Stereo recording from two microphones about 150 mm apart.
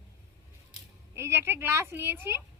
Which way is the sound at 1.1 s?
15° right (ahead or behind).